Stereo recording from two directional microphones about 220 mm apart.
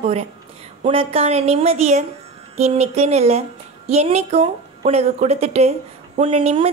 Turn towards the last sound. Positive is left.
turn(degrees=-25)  # may be behind; listen again after turning